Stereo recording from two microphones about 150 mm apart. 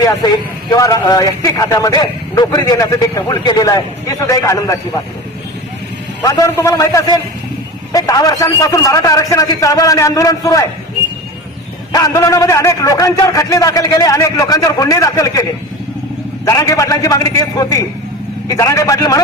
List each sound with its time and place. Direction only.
0.8 s a man's voice: 25° left (ahead or behind)
6.2 s a man's voice: 20° left (ahead or behind)
11.9 s a man's voice: 25° left (ahead or behind)
16.5 s a man's voice: 25° left (ahead or behind)